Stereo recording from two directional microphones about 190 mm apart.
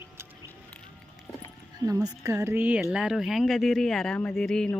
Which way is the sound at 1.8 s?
20° right (ahead or behind).